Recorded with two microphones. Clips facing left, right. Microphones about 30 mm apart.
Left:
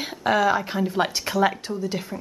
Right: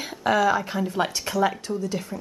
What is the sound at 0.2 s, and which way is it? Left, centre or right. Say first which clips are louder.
Speech: even; centre.